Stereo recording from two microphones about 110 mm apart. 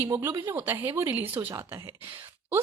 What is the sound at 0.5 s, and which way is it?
A woman's voice, 20° right (ahead or behind).